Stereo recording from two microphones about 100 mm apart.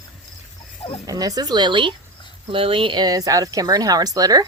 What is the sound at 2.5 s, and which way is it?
Speech, 65° right (ahead or behind).